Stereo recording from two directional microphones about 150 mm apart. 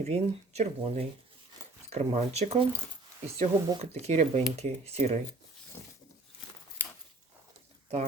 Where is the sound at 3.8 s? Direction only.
45° right (ahead or behind).